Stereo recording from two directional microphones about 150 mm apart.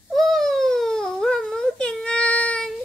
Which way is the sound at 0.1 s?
Centre (ahead or behind).